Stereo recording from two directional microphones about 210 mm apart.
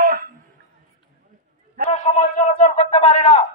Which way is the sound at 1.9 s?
35° left (ahead or behind).